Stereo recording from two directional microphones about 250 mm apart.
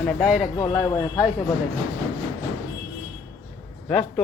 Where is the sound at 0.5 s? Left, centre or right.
Centre.